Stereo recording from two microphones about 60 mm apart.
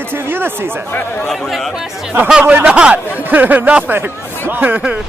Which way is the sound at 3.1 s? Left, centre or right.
Right.